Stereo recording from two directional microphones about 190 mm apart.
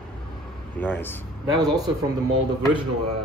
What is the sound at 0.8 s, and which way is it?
Speech, 10° left (ahead or behind).